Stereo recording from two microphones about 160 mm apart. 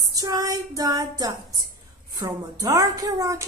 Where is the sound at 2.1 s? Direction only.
25° right (ahead or behind).